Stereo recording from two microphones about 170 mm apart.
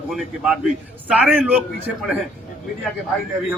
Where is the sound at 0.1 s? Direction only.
Centre (ahead or behind).